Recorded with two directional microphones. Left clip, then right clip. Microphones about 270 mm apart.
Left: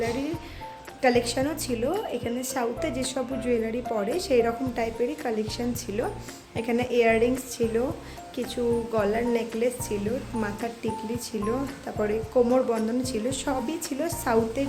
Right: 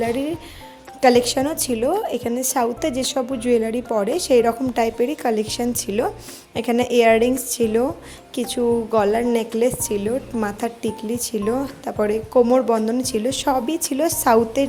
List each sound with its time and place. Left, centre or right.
1.0 s a woman's voice: right